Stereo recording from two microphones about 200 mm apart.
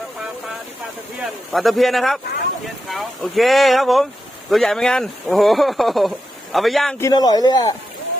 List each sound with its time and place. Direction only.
1.2 s speech: centre (ahead or behind)
7.0 s speech: 20° left (ahead or behind)